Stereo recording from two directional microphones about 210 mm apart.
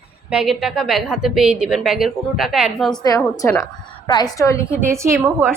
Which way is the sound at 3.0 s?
15° left (ahead or behind).